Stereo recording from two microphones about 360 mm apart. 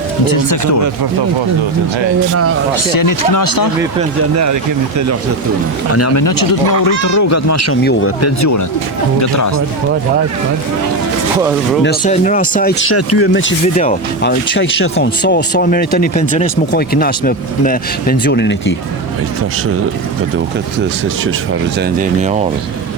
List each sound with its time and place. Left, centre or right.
0.3 s speech: left
2.7 s speech: left
5.9 s speech: left
6.2 s speech: left
11.8 s speech: left
12.9 s speech: left
13.7 s speech: left